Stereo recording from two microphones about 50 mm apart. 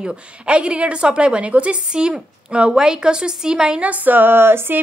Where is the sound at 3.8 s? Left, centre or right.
Right.